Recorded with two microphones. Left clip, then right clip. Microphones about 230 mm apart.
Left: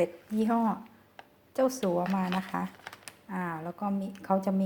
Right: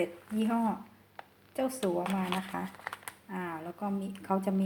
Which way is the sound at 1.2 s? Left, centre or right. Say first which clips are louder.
Left 6 dB; centre.